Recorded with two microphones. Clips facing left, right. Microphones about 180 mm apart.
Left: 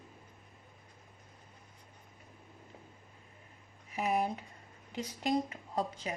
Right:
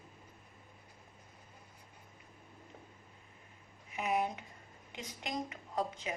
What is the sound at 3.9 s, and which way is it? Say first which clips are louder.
A woman's voice: left 2 dB; 35° left (ahead or behind).